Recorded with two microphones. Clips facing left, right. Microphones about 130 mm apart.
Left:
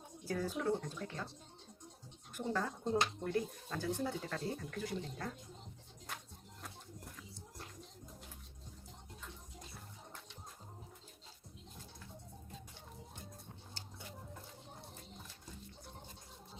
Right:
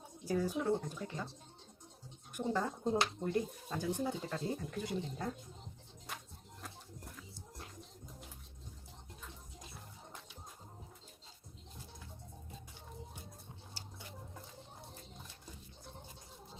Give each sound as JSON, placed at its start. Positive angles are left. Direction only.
{"t": 0.3, "sound": "speech", "side_deg": -15}
{"t": 2.3, "sound": "speech", "side_deg": -15}
{"t": 6.6, "sound": "music", "side_deg": 0}